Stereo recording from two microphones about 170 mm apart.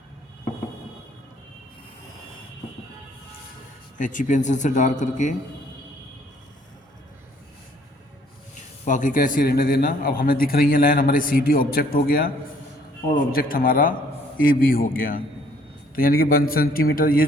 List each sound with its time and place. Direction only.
3.9 s a man's voice: 50° left (ahead or behind)
8.8 s speech: 50° left (ahead or behind)